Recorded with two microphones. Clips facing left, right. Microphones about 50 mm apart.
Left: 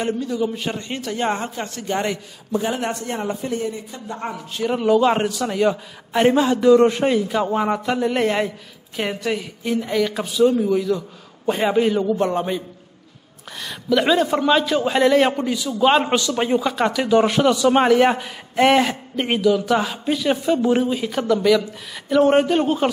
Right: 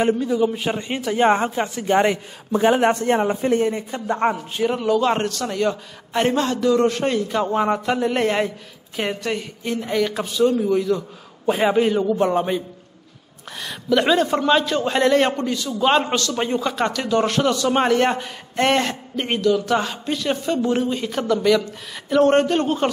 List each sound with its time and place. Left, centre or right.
0.0 s a man's voice: centre
2.5 s speech: right
3.4 s speech: right
4.6 s a man's voice: centre